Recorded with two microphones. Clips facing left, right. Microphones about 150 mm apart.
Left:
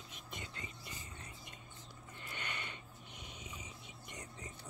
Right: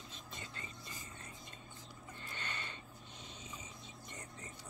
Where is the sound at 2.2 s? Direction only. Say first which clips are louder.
Left 1 dB; 15° left (ahead or behind).